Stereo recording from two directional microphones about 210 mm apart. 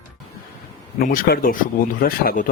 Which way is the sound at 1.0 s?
45° left (ahead or behind).